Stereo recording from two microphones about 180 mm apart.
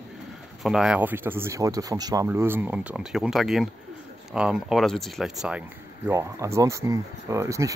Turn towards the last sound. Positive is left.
turn(degrees=-15)  # may be behind; listen again after turning